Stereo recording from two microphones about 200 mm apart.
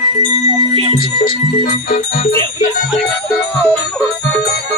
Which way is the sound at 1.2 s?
45° left (ahead or behind).